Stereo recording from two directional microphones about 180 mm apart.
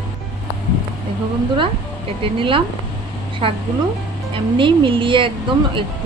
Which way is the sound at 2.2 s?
30° right (ahead or behind).